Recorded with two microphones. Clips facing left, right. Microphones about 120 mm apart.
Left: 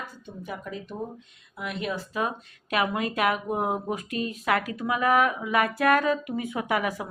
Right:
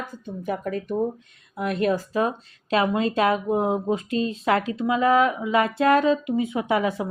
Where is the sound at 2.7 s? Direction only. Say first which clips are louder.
Right 5 dB; 30° right (ahead or behind).